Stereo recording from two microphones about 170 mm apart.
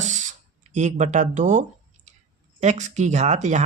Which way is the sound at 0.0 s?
45° right (ahead or behind).